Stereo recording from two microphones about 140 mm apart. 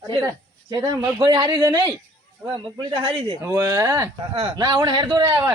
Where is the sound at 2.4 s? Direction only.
35° right (ahead or behind).